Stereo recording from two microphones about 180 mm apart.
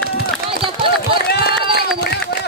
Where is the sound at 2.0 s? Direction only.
60° left (ahead or behind).